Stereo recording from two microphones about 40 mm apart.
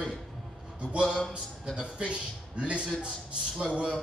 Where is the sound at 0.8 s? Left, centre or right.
Right.